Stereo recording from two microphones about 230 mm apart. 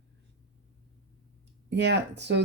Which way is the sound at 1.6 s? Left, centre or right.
Right.